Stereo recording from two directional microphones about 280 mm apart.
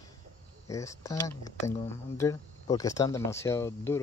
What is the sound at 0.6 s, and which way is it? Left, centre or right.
Speech, centre.